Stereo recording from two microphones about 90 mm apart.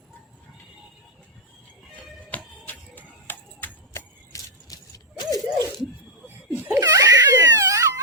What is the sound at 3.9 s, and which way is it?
Vehicle, 35° left (ahead or behind).